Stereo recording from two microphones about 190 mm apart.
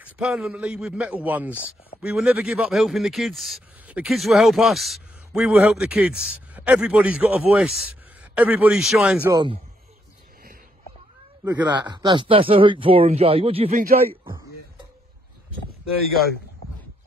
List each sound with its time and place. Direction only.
0.0 s a man's voice: 5° right (ahead or behind)
9.3 s speech: 25° right (ahead or behind)
11.4 s speech: 20° right (ahead or behind)
13.7 s a man's voice: 50° right (ahead or behind)